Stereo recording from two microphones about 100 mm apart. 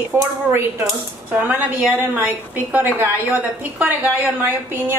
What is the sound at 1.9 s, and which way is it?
A woman's voice, 20° right (ahead or behind).